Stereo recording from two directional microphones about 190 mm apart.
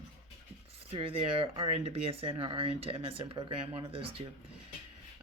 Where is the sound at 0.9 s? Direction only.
30° right (ahead or behind).